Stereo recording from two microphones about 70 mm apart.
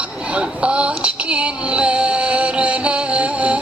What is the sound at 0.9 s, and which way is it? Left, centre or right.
Music, centre.